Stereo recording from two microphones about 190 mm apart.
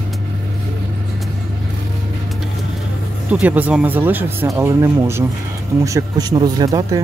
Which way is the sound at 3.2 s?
10° right (ahead or behind).